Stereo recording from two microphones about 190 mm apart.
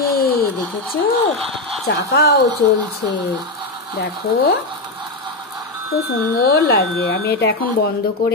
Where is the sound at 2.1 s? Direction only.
60° left (ahead or behind).